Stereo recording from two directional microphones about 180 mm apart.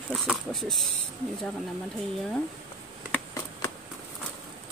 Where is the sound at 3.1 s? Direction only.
15° left (ahead or behind).